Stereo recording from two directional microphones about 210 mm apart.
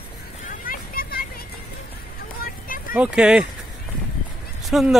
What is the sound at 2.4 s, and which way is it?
Vehicle, 40° left (ahead or behind).